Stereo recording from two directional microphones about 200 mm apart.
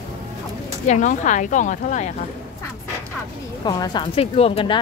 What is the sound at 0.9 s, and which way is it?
Speech, 35° left (ahead or behind).